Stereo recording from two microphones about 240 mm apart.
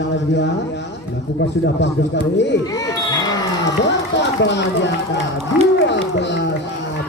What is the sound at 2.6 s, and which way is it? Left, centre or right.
Children playing, centre.